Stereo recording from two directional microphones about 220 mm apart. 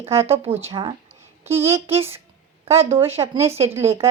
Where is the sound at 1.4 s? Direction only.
10° right (ahead or behind).